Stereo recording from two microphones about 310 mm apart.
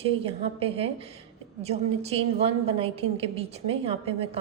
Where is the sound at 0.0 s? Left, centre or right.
Centre.